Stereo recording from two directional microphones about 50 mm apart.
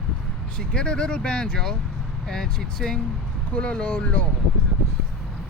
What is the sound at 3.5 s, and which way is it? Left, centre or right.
Speech, left.